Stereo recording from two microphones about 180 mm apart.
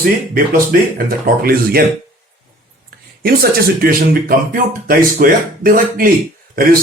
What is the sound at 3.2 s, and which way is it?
Speech, 55° right (ahead or behind).